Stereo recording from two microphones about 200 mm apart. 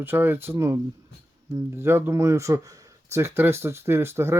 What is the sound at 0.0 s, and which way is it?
Speech, 10° right (ahead or behind).